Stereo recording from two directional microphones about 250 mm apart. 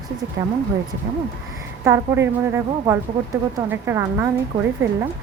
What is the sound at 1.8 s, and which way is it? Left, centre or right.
Speech, centre.